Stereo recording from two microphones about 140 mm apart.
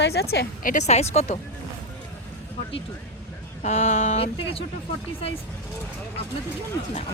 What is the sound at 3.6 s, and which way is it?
Speech, 50° left (ahead or behind).